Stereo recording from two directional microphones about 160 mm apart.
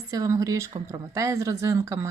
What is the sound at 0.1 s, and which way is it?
Speech, 20° right (ahead or behind).